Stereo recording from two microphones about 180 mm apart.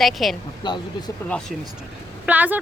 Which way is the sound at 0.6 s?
25° left (ahead or behind).